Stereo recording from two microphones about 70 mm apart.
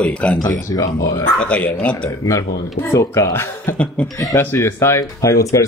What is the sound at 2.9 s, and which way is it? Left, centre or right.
Speech, left.